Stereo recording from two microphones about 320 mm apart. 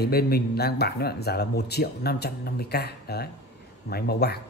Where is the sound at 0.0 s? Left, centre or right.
Left.